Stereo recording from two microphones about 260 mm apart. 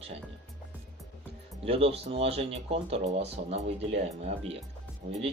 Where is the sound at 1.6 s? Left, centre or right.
Right.